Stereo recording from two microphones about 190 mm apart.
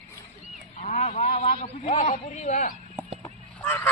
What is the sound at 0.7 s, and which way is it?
A man's voice, 35° left (ahead or behind).